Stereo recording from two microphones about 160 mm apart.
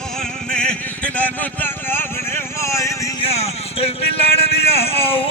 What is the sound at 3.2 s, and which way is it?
A man's voice, 40° left (ahead or behind).